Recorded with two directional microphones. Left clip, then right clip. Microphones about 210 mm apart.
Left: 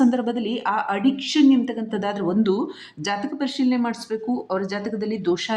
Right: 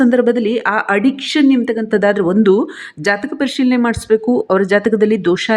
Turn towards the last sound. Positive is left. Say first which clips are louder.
# right 10 dB
turn(degrees=-25)  # may be behind; listen again after turning